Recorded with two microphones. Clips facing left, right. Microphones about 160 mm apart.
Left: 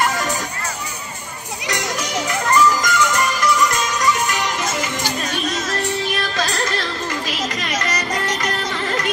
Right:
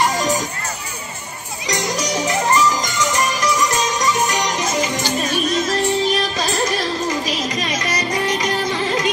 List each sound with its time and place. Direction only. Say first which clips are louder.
1.7 s music: right 3 dB; 20° right (ahead or behind)
5.7 s music: right 5 dB; 20° right (ahead or behind)